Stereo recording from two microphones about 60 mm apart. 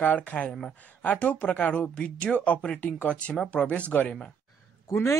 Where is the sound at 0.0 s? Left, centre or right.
Left.